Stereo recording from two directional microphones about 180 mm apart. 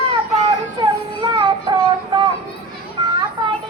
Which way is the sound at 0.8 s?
25° right (ahead or behind).